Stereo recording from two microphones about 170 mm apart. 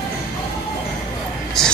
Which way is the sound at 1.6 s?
5° left (ahead or behind).